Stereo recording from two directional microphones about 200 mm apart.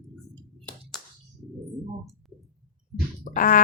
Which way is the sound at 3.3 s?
45° left (ahead or behind).